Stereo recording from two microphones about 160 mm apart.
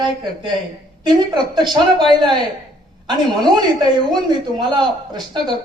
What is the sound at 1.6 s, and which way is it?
A woman's voice, 30° right (ahead or behind).